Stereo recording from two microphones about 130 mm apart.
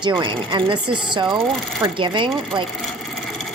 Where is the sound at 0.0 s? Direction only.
35° right (ahead or behind).